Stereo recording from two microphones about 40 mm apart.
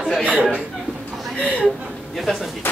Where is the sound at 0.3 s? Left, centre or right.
Right.